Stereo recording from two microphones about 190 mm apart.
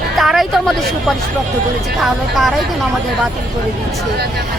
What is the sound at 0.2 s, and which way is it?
A woman's voice, centre (ahead or behind).